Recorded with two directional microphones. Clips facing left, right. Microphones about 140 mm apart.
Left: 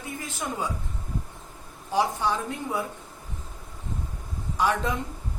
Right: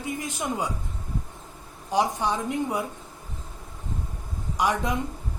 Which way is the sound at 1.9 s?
20° right (ahead or behind).